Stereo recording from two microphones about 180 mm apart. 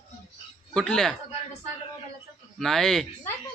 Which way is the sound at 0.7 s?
5° left (ahead or behind).